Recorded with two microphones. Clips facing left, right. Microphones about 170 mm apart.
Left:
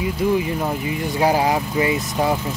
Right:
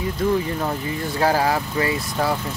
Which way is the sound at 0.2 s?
10° left (ahead or behind).